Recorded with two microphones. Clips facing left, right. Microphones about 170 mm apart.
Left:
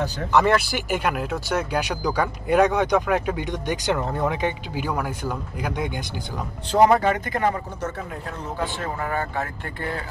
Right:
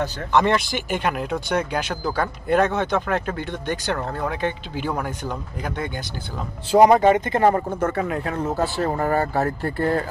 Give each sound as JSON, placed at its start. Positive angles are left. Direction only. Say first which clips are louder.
{"t": 0.0, "sound": "speech", "louder": "even", "side_deg": 5}
{"t": 6.7, "sound": "speech", "louder": "right 4 dB", "side_deg": -15}
{"t": 7.4, "sound": "speech", "louder": "right 6 dB", "side_deg": -50}
{"t": 8.0, "sound": "speech", "louder": "right 8 dB", "side_deg": -70}